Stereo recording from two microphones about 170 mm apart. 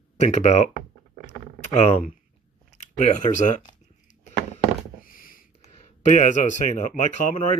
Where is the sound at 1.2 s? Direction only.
45° left (ahead or behind).